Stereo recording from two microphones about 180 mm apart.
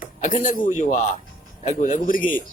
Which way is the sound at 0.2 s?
45° left (ahead or behind).